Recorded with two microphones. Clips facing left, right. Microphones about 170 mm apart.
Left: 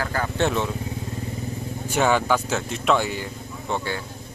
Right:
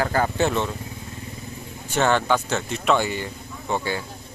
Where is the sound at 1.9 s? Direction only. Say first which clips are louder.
Even; 10° left (ahead or behind).